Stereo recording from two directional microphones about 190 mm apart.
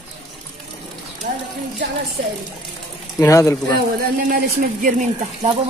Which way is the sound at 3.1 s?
15° left (ahead or behind).